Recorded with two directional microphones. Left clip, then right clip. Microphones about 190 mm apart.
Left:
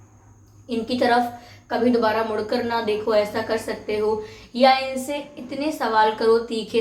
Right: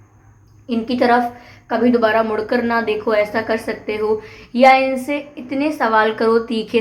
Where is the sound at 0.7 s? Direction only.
40° right (ahead or behind).